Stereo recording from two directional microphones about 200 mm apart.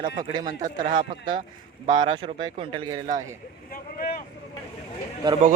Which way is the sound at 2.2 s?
25° right (ahead or behind).